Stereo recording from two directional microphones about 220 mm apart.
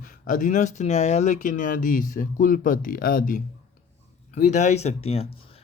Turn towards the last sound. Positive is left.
turn(degrees=25)  # may be behind; listen again after turning